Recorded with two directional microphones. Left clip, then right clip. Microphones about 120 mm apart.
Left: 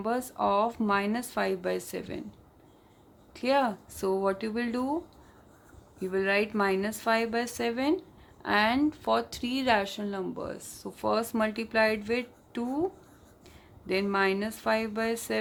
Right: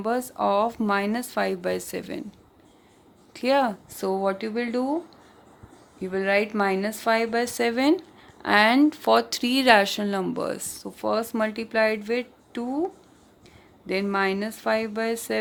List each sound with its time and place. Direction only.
0.0 s speech: 50° right (ahead or behind)
3.3 s speech: 55° right (ahead or behind)
4.0 s speech: 35° right (ahead or behind)
6.0 s speech: 35° right (ahead or behind)